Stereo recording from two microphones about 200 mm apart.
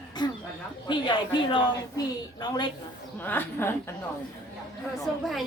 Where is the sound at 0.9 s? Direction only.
25° left (ahead or behind).